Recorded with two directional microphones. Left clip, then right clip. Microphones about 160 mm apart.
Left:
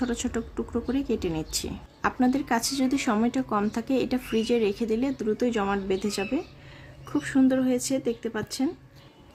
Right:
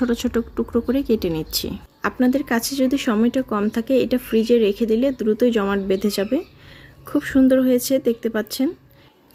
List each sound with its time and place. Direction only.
0.0 s a woman's voice: 20° right (ahead or behind)